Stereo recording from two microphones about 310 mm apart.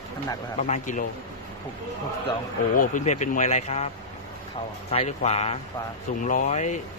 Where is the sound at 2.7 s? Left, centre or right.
Left.